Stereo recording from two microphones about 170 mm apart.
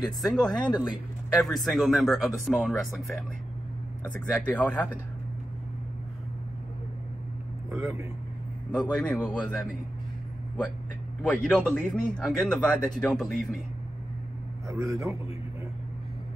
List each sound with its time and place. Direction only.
0.0 s speech: centre (ahead or behind)
7.7 s a man's voice: 15° right (ahead or behind)
8.7 s speech: 10° left (ahead or behind)
11.2 s speech: 5° left (ahead or behind)
14.7 s a man's voice: 15° right (ahead or behind)